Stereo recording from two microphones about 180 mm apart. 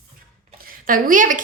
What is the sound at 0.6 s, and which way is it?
Speech, 50° right (ahead or behind).